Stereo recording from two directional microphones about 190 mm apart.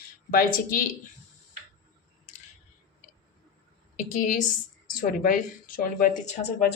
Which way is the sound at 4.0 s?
45° left (ahead or behind).